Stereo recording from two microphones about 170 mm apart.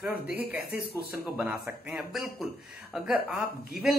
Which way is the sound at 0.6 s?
65° left (ahead or behind).